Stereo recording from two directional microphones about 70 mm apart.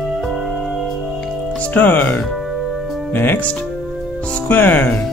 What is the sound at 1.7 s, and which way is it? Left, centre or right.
Speech, left.